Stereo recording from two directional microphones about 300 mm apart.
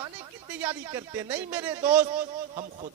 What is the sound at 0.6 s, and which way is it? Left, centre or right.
A man's voice, centre.